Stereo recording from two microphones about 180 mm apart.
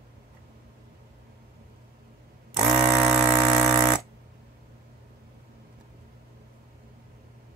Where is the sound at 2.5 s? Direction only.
40° right (ahead or behind).